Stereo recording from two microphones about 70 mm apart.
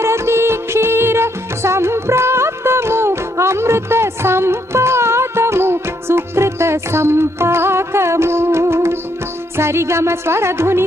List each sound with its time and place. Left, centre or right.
0.0 s music: right